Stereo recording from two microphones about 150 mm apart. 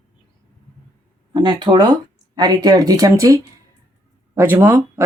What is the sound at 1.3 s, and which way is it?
Speech, 30° right (ahead or behind).